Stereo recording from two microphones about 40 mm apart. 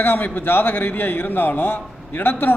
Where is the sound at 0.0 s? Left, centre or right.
Left.